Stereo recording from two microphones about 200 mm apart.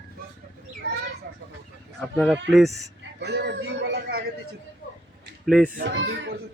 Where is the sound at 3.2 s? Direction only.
55° right (ahead or behind).